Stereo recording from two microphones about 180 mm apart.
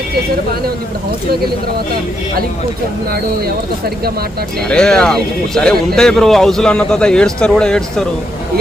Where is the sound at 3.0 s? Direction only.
55° right (ahead or behind).